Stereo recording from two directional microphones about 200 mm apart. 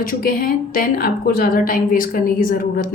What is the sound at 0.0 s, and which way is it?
A woman's voice, 45° left (ahead or behind).